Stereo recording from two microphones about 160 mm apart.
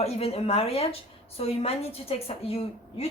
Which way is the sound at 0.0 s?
40° left (ahead or behind).